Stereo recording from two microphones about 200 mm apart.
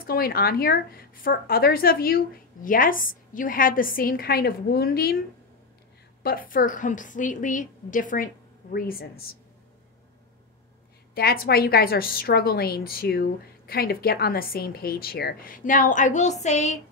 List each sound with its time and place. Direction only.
0.0 s a woman's voice: 45° left (ahead or behind)
6.2 s a woman's voice: 45° left (ahead or behind)
11.1 s a woman's voice: 50° left (ahead or behind)